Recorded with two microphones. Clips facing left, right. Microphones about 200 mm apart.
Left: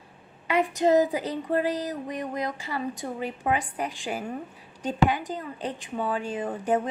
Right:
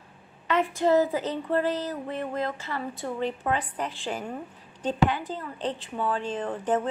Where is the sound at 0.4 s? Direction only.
15° left (ahead or behind).